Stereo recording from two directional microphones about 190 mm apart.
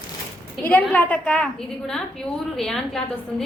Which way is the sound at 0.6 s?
10° left (ahead or behind).